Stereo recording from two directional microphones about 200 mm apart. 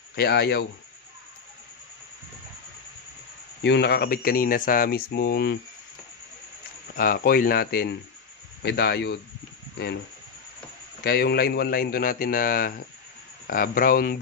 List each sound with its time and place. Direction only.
0.1 s speech: 55° left (ahead or behind)
3.6 s speech: 55° left (ahead or behind)
7.0 s speech: 45° left (ahead or behind)
11.1 s speech: 50° left (ahead or behind)